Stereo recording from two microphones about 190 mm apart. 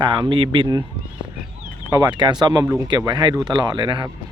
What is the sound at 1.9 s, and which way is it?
Speech, 15° right (ahead or behind).